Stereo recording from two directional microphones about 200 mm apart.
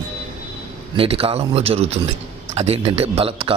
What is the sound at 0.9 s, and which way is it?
A man's voice, 30° right (ahead or behind).